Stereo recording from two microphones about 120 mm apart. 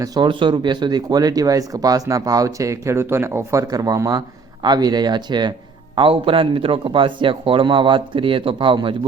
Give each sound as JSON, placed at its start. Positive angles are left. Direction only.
{"t": 0.0, "sound": "speech", "side_deg": -35}